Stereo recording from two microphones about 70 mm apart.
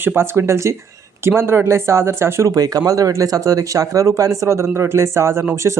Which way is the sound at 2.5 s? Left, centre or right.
Right.